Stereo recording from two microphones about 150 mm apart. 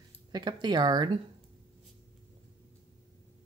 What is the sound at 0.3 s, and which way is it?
Speech, 30° right (ahead or behind).